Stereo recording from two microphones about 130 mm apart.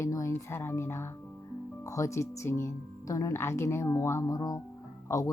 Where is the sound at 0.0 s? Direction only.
25° left (ahead or behind).